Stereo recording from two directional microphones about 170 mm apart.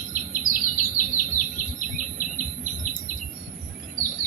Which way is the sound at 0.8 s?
55° left (ahead or behind).